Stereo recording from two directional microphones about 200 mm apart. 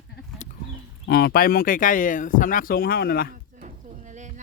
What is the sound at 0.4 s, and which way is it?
Livestock, 35° left (ahead or behind).